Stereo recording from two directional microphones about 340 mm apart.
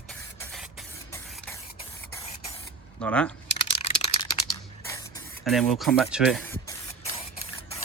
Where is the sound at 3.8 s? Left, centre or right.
Centre.